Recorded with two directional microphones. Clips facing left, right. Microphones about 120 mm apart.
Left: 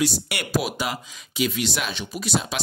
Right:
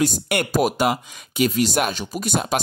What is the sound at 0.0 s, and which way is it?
Speech, 50° right (ahead or behind).